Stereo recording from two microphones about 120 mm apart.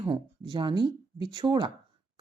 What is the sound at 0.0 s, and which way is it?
Speech, 35° right (ahead or behind).